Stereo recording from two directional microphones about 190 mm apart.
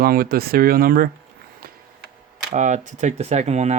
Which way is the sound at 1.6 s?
50° right (ahead or behind).